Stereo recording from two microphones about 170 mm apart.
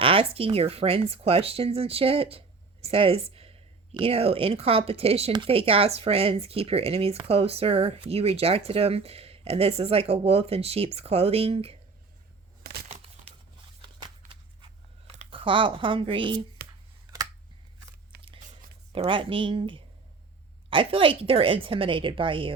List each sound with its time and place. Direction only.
0.0 s speech: 35° right (ahead or behind)
14.6 s writing: 35° right (ahead or behind)
16.6 s a sound: 70° right (ahead or behind)
18.9 s speech: 30° right (ahead or behind)